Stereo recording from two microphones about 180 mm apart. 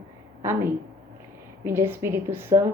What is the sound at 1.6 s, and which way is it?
Speech, 15° right (ahead or behind).